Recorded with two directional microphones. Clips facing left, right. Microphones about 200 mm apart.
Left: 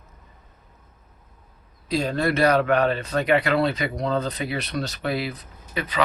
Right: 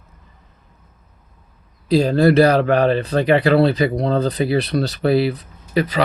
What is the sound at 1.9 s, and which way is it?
Speech, 35° right (ahead or behind).